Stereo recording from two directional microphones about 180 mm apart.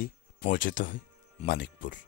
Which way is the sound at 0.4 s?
50° left (ahead or behind).